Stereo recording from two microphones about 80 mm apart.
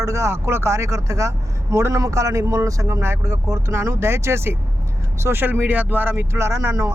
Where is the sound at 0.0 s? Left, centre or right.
Right.